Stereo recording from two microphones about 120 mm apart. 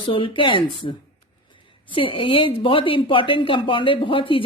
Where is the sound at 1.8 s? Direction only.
45° left (ahead or behind).